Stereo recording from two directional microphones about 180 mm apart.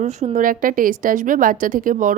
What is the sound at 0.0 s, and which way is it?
A woman's voice, 40° right (ahead or behind).